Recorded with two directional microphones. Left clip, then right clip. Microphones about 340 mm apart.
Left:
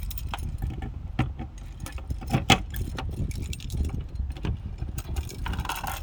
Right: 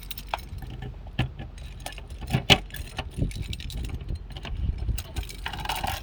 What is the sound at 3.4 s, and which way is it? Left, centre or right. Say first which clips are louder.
Vehicle: right 2 dB; centre.